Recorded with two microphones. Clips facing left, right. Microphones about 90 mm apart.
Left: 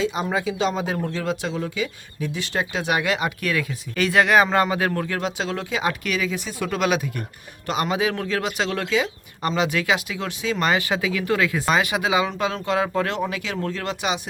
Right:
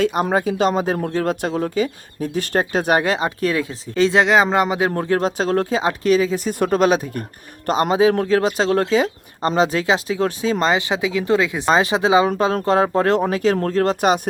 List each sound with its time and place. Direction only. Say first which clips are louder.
0.0 s speech: right 5 dB; 55° right (ahead or behind)
5.8 s speech: right 7 dB; 30° right (ahead or behind)
6.5 s speech: right 6 dB; 45° right (ahead or behind)
10.6 s speech: right 1 dB; 20° right (ahead or behind); by 14.2 s 45° right (ahead or behind)